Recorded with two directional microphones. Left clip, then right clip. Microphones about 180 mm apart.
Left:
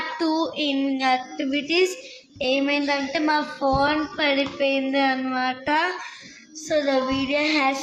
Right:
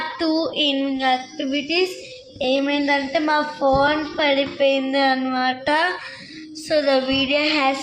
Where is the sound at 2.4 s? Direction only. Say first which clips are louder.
Right 2 dB; 10° right (ahead or behind).